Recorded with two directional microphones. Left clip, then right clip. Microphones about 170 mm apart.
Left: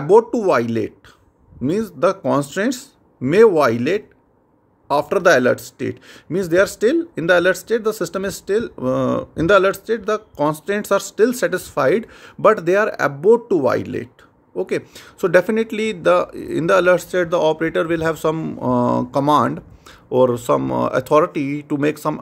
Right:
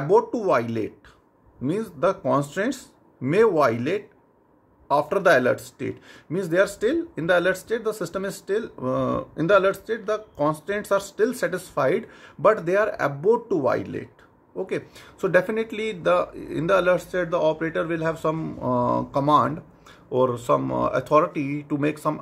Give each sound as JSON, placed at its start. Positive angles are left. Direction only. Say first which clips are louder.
{"t": 0.0, "sound": "speech", "louder": "left 6 dB", "side_deg": 50}